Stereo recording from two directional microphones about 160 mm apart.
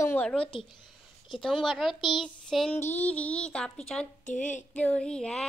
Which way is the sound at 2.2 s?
5° left (ahead or behind).